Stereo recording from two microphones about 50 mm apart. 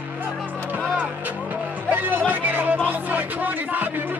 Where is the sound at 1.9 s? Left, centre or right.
Right.